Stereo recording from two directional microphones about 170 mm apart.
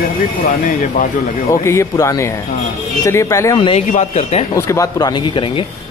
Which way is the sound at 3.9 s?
40° left (ahead or behind).